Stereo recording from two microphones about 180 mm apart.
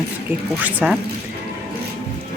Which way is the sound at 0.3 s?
10° right (ahead or behind).